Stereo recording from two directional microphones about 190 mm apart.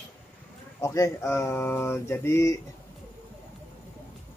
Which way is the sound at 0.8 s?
15° left (ahead or behind).